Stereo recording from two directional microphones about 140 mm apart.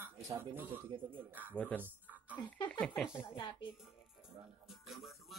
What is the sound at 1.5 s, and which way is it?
Speech, 10° left (ahead or behind).